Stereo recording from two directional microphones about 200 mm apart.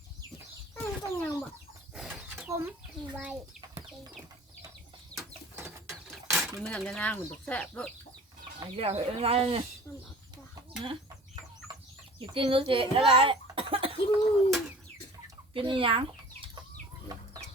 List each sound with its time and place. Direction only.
0.8 s bird: 15° left (ahead or behind)
2.0 s a sound: 5° right (ahead or behind)
5.5 s bird: 15° right (ahead or behind)
6.6 s speech: 5° left (ahead or behind)
8.6 s speech: 30° right (ahead or behind)
9.9 s a sound: 15° left (ahead or behind)
10.3 s chicken: 20° right (ahead or behind)
12.2 s speech: 25° right (ahead or behind)
13.1 s cough: 25° right (ahead or behind)
13.9 s bird: 30° left (ahead or behind)
15.5 s speech: 25° right (ahead or behind)